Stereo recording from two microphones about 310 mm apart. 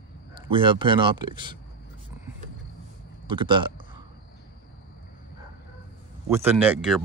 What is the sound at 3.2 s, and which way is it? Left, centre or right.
Speech, centre.